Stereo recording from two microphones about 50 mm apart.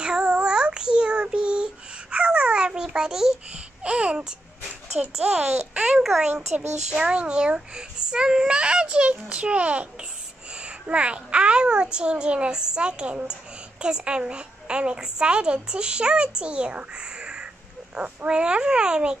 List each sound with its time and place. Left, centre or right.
0.0 s child singing: centre
3.5 s a child's voice: right